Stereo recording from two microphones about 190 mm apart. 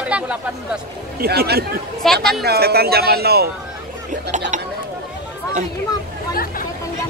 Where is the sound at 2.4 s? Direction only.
55° right (ahead or behind).